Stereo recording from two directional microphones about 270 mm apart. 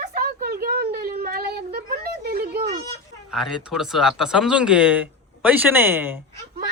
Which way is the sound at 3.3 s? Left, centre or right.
Centre.